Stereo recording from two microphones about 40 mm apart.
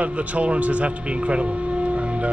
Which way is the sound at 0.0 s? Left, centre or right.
Right.